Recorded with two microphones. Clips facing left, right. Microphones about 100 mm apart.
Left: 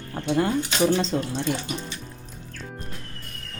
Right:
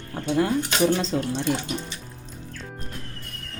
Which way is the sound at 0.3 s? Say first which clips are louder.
Right 1 dB; centre (ahead or behind).